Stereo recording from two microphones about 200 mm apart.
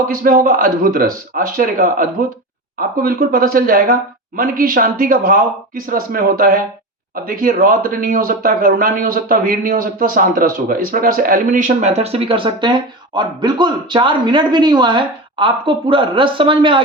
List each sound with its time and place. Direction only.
0.1 s speech: 45° right (ahead or behind); by 16.8 s 25° right (ahead or behind)